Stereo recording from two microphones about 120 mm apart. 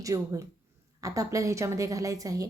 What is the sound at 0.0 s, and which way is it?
A woman's voice, 30° right (ahead or behind).